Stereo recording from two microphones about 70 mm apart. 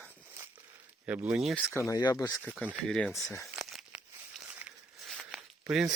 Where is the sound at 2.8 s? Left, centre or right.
Centre.